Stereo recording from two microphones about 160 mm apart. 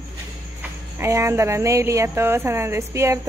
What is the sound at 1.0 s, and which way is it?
Speech, 15° right (ahead or behind).